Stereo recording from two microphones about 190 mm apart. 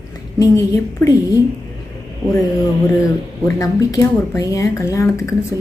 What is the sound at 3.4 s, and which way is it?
Speech, 15° left (ahead or behind).